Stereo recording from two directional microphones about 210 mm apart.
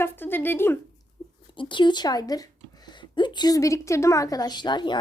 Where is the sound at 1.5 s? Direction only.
25° left (ahead or behind).